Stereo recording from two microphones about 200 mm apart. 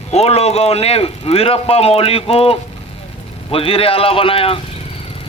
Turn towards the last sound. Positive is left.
turn(degrees=30)  # may be behind; listen again after turning